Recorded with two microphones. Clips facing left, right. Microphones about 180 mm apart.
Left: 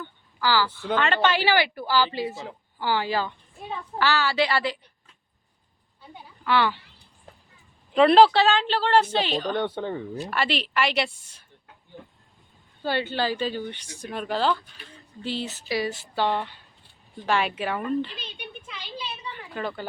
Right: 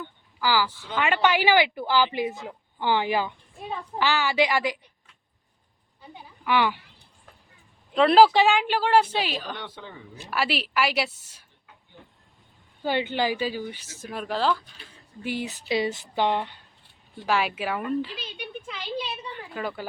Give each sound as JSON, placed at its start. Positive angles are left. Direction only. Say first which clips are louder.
{"t": 0.0, "sound": "a sound", "louder": "left 1 dB", "side_deg": -15}
{"t": 0.9, "sound": "a woman's voice", "louder": "even", "side_deg": -10}
{"t": 6.4, "sound": "speech", "louder": "even", "side_deg": -15}
{"t": 7.9, "sound": "speech", "louder": "left 2 dB", "side_deg": 0}
{"t": 8.2, "sound": "a woman's voice", "louder": "even", "side_deg": -15}
{"t": 9.6, "sound": "speech", "louder": "left 12 dB", "side_deg": 55}
{"t": 10.2, "sound": "speech", "louder": "right 2 dB", "side_deg": -5}
{"t": 12.8, "sound": "speech", "louder": "right 1 dB", "side_deg": -15}
{"t": 15.2, "sound": "a woman's voice", "louder": "even", "side_deg": -15}
{"t": 17.2, "sound": "speech", "louder": "even", "side_deg": -5}
{"t": 19.5, "sound": "a woman's voice", "louder": "left 1 dB", "side_deg": -5}